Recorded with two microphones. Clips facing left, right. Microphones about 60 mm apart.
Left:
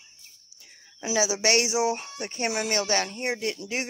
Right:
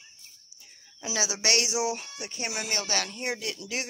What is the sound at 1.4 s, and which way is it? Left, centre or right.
Speech, left.